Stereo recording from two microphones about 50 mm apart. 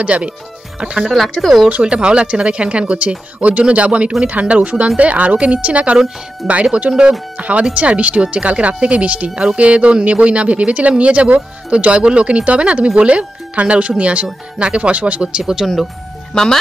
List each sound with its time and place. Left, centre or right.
0.0 s speech: right
1.0 s speech: centre
1.7 s speech: right
6.9 s speech: centre
7.3 s speech: right
15.6 s speech: centre
16.3 s speech: centre